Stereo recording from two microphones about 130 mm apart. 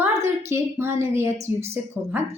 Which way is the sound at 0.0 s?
20° right (ahead or behind).